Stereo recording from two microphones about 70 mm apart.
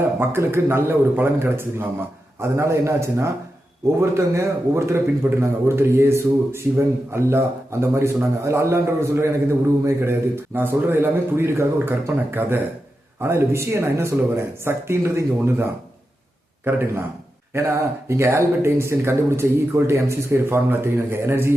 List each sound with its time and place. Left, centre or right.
0.2 s a man's voice: right
16.6 s speech: right